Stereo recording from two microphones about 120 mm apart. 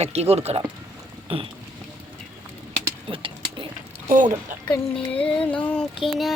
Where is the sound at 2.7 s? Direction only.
45° right (ahead or behind).